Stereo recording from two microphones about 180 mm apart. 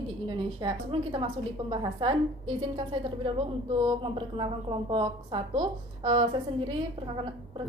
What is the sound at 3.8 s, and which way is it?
A woman's voice, 30° right (ahead or behind).